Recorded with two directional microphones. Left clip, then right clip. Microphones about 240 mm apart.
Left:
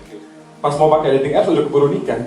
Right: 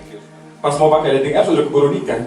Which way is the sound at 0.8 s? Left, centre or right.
Centre.